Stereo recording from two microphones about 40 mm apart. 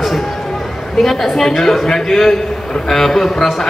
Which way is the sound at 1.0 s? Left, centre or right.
Centre.